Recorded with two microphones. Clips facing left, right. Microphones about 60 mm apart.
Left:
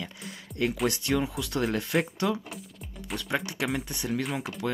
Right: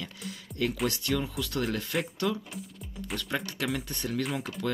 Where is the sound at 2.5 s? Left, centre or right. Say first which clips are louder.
Even; centre.